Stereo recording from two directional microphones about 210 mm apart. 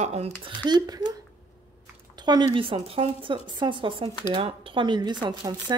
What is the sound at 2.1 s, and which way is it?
Speech, 20° right (ahead or behind).